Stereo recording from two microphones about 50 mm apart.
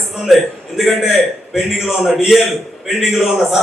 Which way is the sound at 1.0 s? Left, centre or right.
Centre.